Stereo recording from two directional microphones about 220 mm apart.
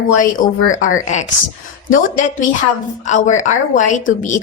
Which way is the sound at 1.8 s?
35° left (ahead or behind).